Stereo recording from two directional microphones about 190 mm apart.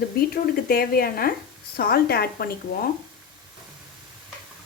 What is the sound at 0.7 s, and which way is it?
A woman's voice, 50° left (ahead or behind).